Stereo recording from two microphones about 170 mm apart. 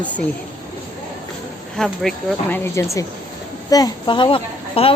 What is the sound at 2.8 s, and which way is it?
A woman's voice, 20° left (ahead or behind).